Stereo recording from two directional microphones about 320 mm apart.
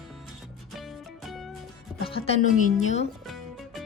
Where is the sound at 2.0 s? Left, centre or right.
Centre.